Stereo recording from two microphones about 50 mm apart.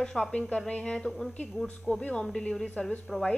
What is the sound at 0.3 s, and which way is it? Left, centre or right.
A woman's voice, left.